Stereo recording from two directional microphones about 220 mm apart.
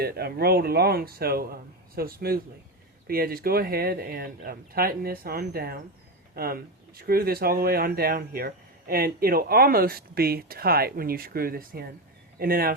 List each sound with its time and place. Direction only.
0.0 s speech: 45° right (ahead or behind)